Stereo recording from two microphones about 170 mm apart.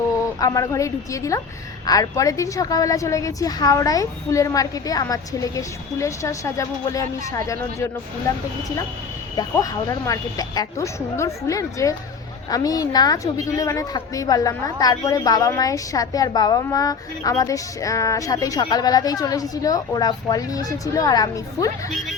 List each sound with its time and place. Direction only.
0.3 s a woman's voice: 20° left (ahead or behind)